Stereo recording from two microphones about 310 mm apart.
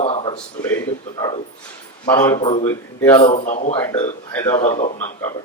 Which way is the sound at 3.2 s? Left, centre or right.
Left.